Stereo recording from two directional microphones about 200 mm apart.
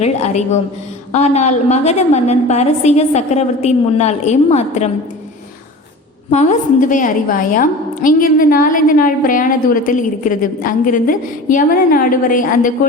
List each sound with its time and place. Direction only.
0.0 s a woman's voice: 35° left (ahead or behind)
6.3 s a woman's voice: 35° left (ahead or behind)